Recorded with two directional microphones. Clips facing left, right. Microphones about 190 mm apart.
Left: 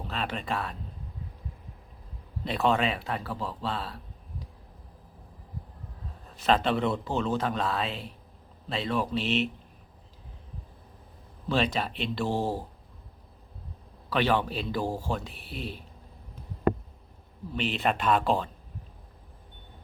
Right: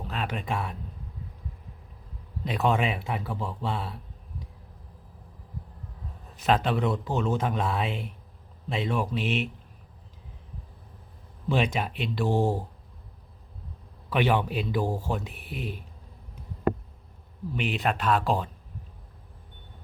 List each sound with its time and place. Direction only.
0.0 s speech: 10° right (ahead or behind)
2.4 s speech: 10° right (ahead or behind)
6.4 s a man's voice: 5° right (ahead or behind)
11.4 s speech: 15° right (ahead or behind)
14.1 s speech: 15° right (ahead or behind)
14.8 s speech: 10° left (ahead or behind)
15.4 s speech: 15° right (ahead or behind)
17.5 s speech: 10° right (ahead or behind)